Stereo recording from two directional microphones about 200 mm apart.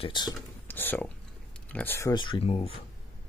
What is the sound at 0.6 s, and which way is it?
Speech, 10° left (ahead or behind).